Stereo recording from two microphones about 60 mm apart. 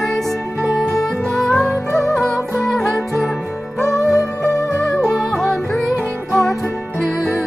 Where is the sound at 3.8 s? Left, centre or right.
Left.